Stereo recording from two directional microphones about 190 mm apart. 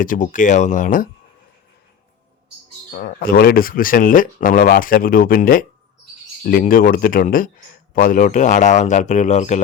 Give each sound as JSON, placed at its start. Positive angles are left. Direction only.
{"t": 0.0, "sound": "speech", "side_deg": 45}
{"t": 2.9, "sound": "speech", "side_deg": 50}